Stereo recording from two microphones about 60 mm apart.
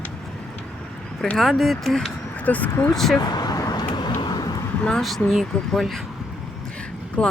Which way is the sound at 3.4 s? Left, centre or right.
Left.